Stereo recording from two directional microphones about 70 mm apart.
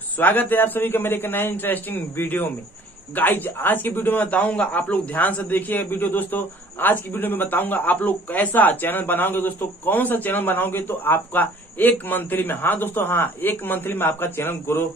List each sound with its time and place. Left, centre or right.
0.2 s a man's voice: left